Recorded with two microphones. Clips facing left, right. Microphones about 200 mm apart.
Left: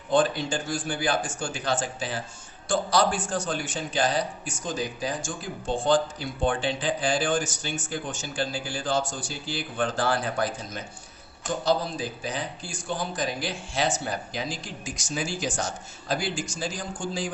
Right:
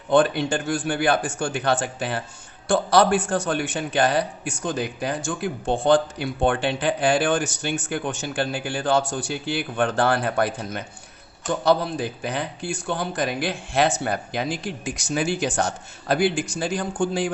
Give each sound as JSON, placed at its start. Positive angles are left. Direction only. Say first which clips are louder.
{"t": 0.1, "sound": "a man's voice", "louder": "right 4 dB", "side_deg": -60}